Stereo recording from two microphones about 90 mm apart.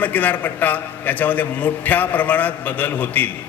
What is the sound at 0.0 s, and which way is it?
A man's voice, 20° left (ahead or behind).